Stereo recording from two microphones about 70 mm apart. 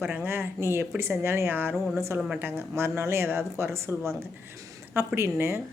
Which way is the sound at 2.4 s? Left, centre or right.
Right.